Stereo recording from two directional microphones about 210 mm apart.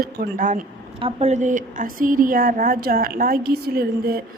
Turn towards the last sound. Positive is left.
turn(degrees=-45)  # may be behind; listen again after turning